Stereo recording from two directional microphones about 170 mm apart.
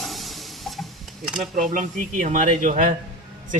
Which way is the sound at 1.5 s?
50° right (ahead or behind).